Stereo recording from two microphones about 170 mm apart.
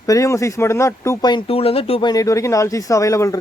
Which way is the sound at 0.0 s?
20° left (ahead or behind).